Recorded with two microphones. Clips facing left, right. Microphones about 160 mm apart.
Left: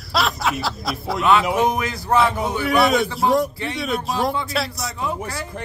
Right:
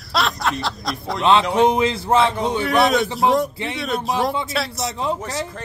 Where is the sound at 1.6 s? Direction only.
25° right (ahead or behind).